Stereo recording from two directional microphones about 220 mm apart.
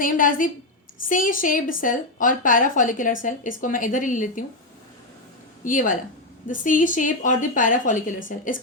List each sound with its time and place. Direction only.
0.0 s a woman's voice: 40° left (ahead or behind)
5.6 s a woman's voice: 35° left (ahead or behind)